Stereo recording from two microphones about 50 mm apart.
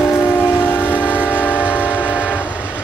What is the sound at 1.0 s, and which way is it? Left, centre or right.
Train, right.